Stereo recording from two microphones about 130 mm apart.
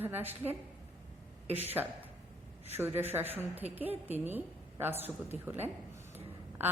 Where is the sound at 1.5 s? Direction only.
15° right (ahead or behind).